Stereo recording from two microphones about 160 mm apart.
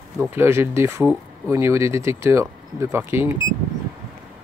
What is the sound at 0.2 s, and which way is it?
Speech, 15° right (ahead or behind).